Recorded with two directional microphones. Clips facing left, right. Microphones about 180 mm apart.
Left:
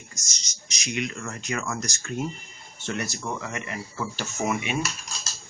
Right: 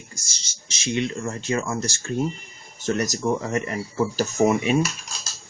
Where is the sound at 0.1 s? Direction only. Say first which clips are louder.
Right 2 dB; 30° right (ahead or behind).